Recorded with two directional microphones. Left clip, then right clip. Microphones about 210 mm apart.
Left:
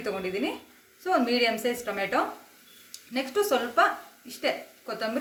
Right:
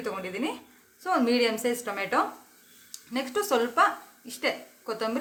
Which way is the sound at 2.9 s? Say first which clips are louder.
Even; 45° right (ahead or behind).